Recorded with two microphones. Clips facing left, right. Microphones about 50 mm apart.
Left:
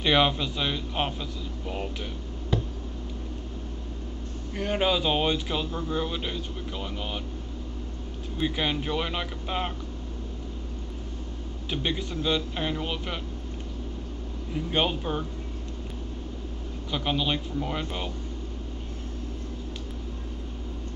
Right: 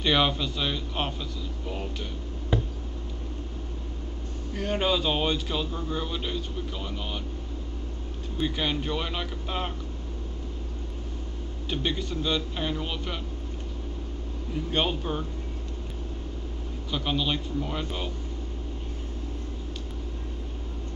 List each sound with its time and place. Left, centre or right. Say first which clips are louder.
0.0 s a man's voice: left 1 dB; centre
2.5 s tick: right 1 dB; centre
4.6 s a man's voice: left 1 dB; centre
8.4 s a man's voice: left 1 dB; centre
11.7 s a man's voice: even; centre
14.5 s a man's voice: left 1 dB; centre
16.9 s a man's voice: left 1 dB; centre